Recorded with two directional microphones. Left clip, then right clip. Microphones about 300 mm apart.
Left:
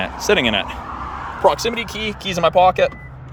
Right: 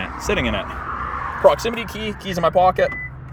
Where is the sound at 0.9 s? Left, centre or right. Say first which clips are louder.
Right 2 dB; left.